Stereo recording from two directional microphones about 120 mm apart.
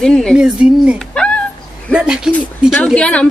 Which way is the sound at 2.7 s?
10° left (ahead or behind).